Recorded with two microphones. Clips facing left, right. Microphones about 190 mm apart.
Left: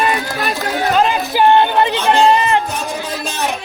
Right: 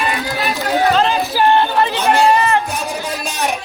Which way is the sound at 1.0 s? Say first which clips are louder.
Left 1 dB; 15° left (ahead or behind).